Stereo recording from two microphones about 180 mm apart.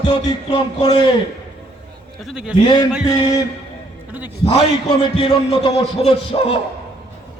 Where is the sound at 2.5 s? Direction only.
25° left (ahead or behind).